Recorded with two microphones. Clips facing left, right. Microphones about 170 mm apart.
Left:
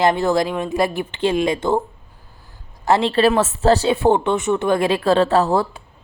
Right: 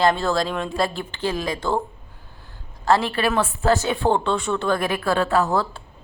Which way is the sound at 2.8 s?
20° left (ahead or behind).